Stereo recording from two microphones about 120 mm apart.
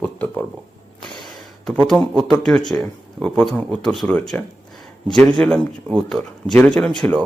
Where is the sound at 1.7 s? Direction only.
Centre (ahead or behind).